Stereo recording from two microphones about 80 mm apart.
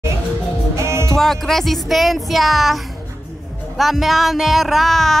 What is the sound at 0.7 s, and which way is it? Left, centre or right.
Music, right.